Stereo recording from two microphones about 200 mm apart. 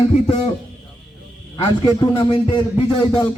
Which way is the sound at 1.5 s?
20° left (ahead or behind).